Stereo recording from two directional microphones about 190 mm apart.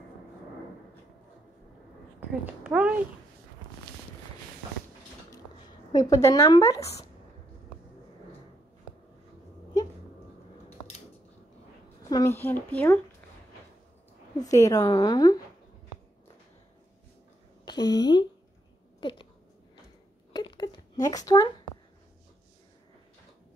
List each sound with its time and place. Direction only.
2.1 s speech: 5° right (ahead or behind)
5.9 s a woman's voice: 20° left (ahead or behind)
12.1 s a woman's voice: 15° left (ahead or behind)
14.4 s a woman's voice: 20° left (ahead or behind)
17.6 s a sound: 20° left (ahead or behind)
20.3 s a sound: 25° left (ahead or behind)